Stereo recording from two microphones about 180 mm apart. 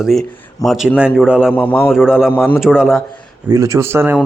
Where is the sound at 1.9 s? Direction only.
5° right (ahead or behind).